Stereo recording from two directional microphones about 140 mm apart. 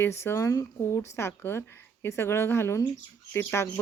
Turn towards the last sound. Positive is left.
turn(degrees=15)  # may be behind; listen again after turning